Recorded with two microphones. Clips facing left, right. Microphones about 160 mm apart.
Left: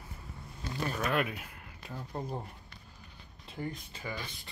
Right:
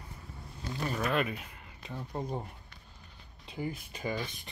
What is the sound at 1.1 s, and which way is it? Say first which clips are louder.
Speech: right 1 dB; centre (ahead or behind).